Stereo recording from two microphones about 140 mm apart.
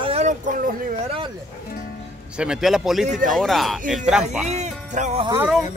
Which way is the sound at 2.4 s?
5° right (ahead or behind).